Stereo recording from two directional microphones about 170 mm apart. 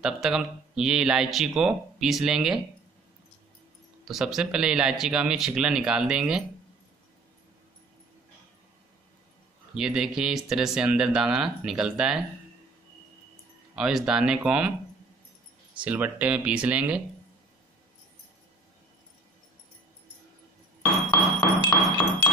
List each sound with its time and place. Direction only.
0.0 s speech: 5° right (ahead or behind)
4.1 s speech: centre (ahead or behind)
9.8 s speech: centre (ahead or behind)
13.7 s speech: 5° right (ahead or behind)
15.7 s speech: 10° right (ahead or behind)
21.4 s glass: 25° left (ahead or behind)